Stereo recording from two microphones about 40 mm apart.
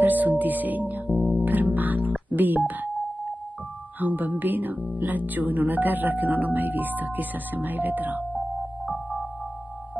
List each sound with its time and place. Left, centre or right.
0.0 s speech: right
1.3 s music: right
2.3 s speech: right
4.0 s speech: right
8.8 s music: centre